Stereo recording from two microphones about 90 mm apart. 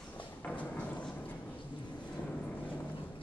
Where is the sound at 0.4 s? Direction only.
15° left (ahead or behind).